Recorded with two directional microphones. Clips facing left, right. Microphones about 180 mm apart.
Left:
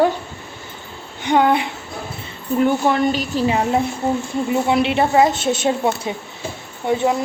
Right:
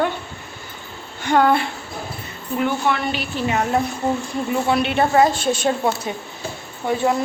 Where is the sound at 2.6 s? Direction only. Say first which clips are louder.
Left 5 dB; 40° left (ahead or behind); by 7.2 s 20° left (ahead or behind).